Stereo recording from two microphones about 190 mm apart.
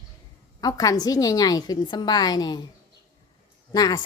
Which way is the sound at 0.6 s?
20° left (ahead or behind).